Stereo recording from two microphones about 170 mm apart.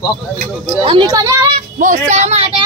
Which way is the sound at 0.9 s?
25° right (ahead or behind).